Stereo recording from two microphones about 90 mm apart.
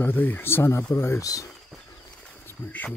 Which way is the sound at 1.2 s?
40° left (ahead or behind).